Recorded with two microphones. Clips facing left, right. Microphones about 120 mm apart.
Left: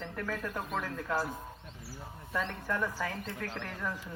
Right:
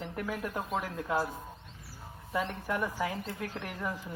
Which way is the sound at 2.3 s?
10° right (ahead or behind).